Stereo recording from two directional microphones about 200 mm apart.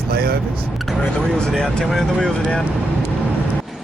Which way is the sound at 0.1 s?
50° right (ahead or behind).